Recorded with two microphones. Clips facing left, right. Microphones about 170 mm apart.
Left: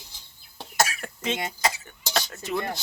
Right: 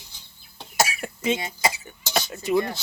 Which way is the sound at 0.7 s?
10° right (ahead or behind).